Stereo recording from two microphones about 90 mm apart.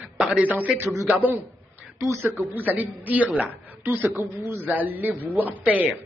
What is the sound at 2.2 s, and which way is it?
Speech, 30° left (ahead or behind).